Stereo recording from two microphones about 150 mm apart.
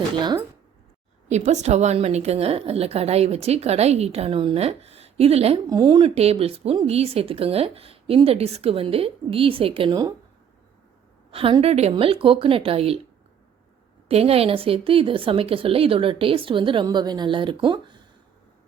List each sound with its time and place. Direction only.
0.2 s a woman's voice: 30° right (ahead or behind)
1.3 s a woman's voice: 50° right (ahead or behind)
5.6 s a woman's voice: 30° right (ahead or behind)
11.3 s a woman's voice: 40° right (ahead or behind)
14.1 s a woman's voice: 40° right (ahead or behind)